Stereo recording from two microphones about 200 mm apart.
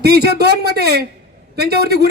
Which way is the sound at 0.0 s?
55° right (ahead or behind).